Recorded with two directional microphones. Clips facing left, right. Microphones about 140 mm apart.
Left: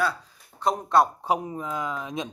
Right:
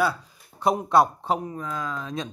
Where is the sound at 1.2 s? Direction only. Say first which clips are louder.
Even; 15° left (ahead or behind).